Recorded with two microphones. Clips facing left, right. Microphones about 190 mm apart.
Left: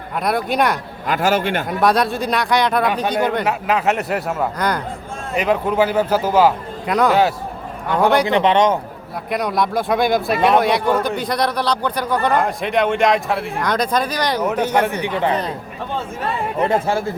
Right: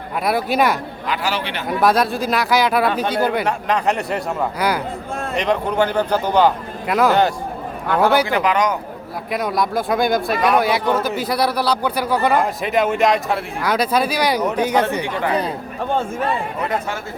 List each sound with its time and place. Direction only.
0.2 s a man's voice: 5° right (ahead or behind)
1.0 s a man's voice: 45° left (ahead or behind)
1.8 s a man's voice: centre (ahead or behind)
2.8 s speech: 15° left (ahead or behind)
3.2 s speech: 5° right (ahead or behind)
3.4 s a man's voice: 5° left (ahead or behind)
5.3 s a man's voice: 5° left (ahead or behind)
8.3 s a man's voice: 30° left (ahead or behind)
9.3 s a man's voice: centre (ahead or behind)
15.0 s a man's voice: 20° left (ahead or behind)
16.6 s speech: 30° left (ahead or behind)